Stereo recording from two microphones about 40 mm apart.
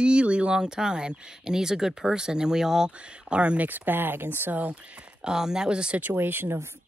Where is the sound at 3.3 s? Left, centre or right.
Right.